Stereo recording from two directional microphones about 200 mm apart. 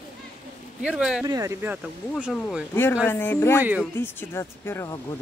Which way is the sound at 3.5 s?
10° right (ahead or behind).